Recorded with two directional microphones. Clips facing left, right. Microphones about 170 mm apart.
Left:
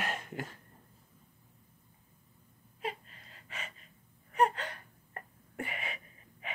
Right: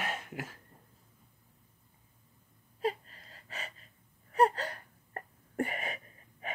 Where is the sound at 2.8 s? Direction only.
35° right (ahead or behind).